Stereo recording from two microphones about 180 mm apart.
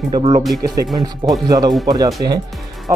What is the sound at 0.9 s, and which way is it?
Speech, 20° right (ahead or behind).